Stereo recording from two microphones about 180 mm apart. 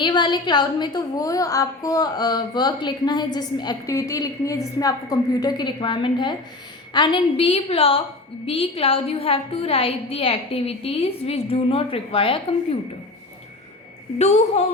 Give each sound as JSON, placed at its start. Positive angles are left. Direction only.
{"t": 0.0, "sound": "a woman's voice", "side_deg": 25}
{"t": 14.2, "sound": "a woman's voice", "side_deg": 40}